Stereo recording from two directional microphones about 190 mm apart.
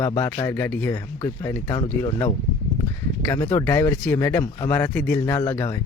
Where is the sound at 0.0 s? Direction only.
15° left (ahead or behind).